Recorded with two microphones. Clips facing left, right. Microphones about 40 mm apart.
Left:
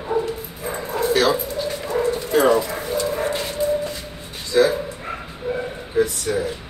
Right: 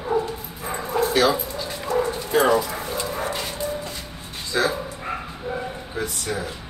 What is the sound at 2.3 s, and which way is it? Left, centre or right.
Bow-wow, centre.